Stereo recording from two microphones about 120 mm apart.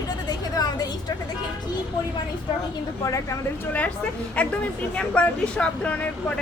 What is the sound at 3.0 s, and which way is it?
Speech, 25° left (ahead or behind).